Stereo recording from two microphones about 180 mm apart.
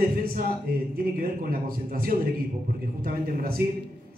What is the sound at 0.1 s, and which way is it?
A man's voice, 55° right (ahead or behind).